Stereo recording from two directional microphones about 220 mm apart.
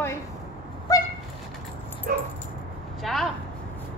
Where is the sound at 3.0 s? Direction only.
Centre (ahead or behind).